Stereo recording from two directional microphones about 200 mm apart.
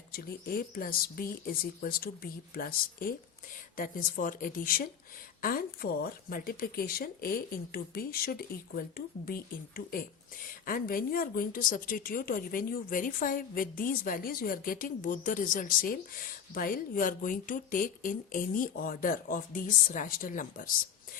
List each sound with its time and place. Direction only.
0.1 s a woman's voice: 50° left (ahead or behind)